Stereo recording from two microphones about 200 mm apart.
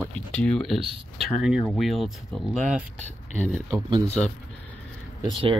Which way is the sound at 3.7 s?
20° right (ahead or behind).